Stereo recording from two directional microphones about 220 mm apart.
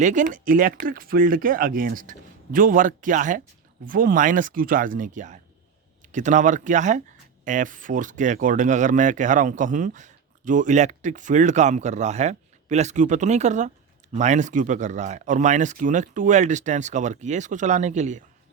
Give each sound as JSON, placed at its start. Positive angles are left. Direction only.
{"t": 0.0, "sound": "speech", "side_deg": -35}